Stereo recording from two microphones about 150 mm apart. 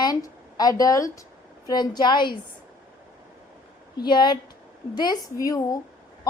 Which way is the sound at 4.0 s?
30° left (ahead or behind).